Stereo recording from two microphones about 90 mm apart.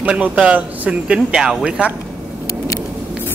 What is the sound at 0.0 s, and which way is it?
Speech, 15° right (ahead or behind).